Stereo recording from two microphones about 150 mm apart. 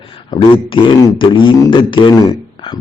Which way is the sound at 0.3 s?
35° left (ahead or behind).